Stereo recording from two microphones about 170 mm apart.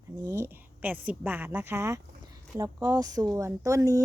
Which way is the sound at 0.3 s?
15° right (ahead or behind).